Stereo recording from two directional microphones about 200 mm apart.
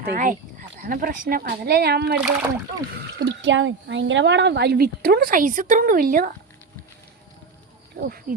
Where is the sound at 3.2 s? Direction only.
65° right (ahead or behind); by 6.3 s 45° right (ahead or behind).